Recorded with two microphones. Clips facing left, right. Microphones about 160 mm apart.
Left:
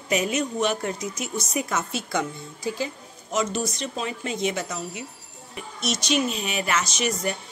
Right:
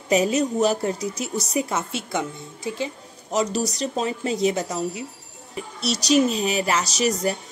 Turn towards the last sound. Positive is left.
turn(degrees=-35)  # may be behind; listen again after turning